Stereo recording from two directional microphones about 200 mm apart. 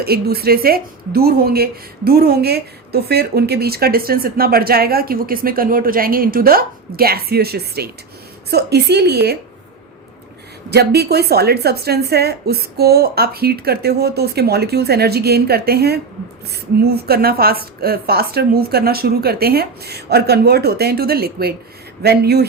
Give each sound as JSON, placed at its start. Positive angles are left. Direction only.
{"t": 0.0, "sound": "a woman's voice", "side_deg": -50}
{"t": 10.7, "sound": "a woman's voice", "side_deg": -55}